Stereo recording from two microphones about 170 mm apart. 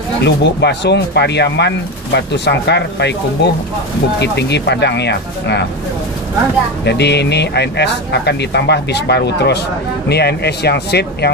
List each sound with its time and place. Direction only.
0.2 s speech: 90° left
6.8 s speech: 85° left